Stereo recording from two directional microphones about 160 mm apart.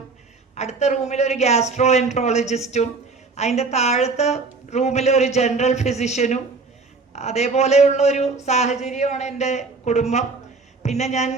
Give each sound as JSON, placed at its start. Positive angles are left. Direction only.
{"t": 0.5, "sound": "speech", "side_deg": 45}